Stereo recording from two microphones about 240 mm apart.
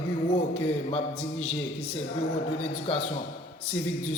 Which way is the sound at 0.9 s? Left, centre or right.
Left.